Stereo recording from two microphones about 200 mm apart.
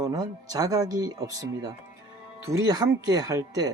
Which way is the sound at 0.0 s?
20° right (ahead or behind).